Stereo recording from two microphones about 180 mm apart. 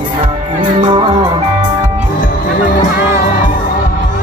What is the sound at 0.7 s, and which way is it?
Music, 25° right (ahead or behind).